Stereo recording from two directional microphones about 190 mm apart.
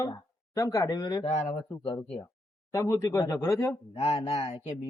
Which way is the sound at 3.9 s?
35° left (ahead or behind).